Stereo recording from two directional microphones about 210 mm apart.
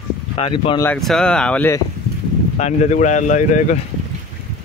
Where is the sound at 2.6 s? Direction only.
35° left (ahead or behind).